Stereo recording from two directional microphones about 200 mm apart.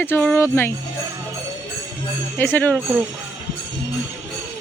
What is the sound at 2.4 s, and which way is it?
Speech, 10° left (ahead or behind).